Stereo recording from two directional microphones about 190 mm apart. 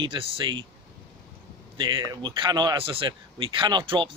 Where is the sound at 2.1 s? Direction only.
25° right (ahead or behind).